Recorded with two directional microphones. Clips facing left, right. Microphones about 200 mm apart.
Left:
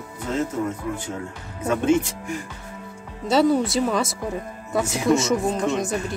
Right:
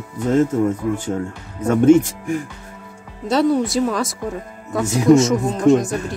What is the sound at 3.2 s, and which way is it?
Speech, centre (ahead or behind).